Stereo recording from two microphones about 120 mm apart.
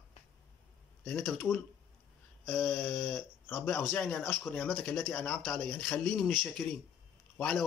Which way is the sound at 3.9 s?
10° left (ahead or behind).